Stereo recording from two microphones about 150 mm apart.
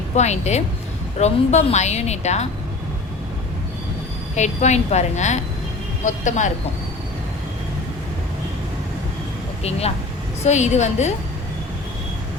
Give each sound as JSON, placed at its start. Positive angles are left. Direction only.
{"t": 0.2, "sound": "a woman's voice", "side_deg": 50}
{"t": 4.4, "sound": "a woman's voice", "side_deg": 50}
{"t": 10.4, "sound": "a woman's voice", "side_deg": 50}